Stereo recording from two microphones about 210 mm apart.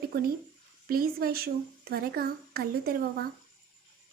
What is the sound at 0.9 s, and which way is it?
A woman's voice, 45° right (ahead or behind).